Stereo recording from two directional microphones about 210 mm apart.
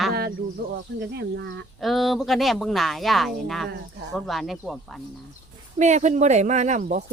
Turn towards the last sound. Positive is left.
turn(degrees=-35)  # may be behind; listen again after turning